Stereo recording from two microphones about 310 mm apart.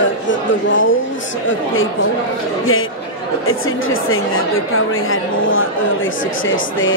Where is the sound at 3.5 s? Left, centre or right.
Left.